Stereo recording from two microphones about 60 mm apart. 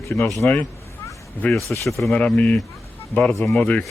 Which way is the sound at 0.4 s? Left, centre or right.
Left.